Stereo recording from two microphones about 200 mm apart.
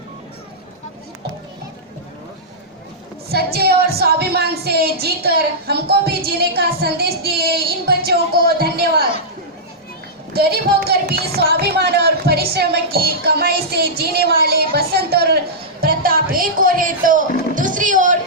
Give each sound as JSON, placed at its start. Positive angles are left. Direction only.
{"t": 3.3, "sound": "a woman's voice", "side_deg": -50}
{"t": 10.3, "sound": "a woman's voice", "side_deg": -50}
{"t": 15.8, "sound": "music", "side_deg": -45}